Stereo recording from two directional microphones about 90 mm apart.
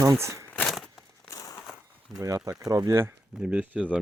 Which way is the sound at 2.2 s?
35° right (ahead or behind).